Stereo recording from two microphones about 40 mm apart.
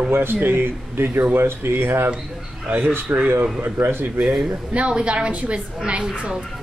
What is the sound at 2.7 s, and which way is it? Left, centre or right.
Speech, right.